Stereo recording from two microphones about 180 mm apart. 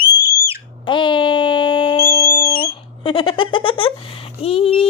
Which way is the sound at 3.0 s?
30° left (ahead or behind).